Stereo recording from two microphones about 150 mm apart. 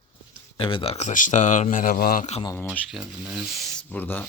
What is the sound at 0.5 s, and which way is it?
Speech, 35° left (ahead or behind).